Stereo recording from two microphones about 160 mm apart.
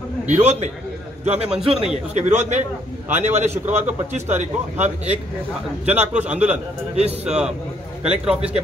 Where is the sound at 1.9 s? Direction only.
45° right (ahead or behind).